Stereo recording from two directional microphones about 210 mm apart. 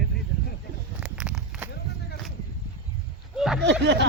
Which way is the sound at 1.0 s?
5° right (ahead or behind).